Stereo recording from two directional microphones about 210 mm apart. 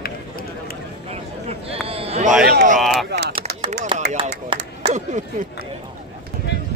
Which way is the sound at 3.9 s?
25° right (ahead or behind).